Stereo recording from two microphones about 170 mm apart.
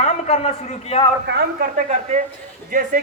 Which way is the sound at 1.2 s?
80° right.